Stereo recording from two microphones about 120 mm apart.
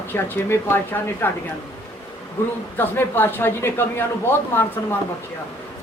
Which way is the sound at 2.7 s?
15° left (ahead or behind).